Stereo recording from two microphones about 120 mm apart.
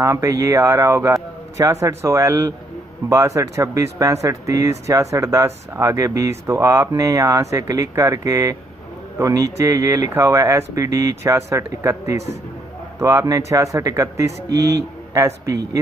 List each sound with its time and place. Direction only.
0.0 s speech: 25° right (ahead or behind)